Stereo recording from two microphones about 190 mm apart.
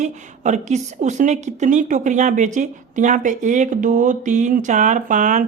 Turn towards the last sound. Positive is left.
turn(degrees=-45)  # may be behind; listen again after turning